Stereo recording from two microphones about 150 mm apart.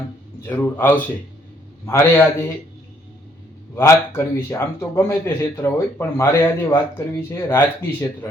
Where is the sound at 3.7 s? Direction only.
15° left (ahead or behind).